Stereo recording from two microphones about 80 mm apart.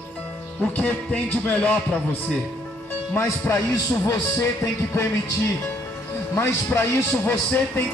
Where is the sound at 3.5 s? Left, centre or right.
Left.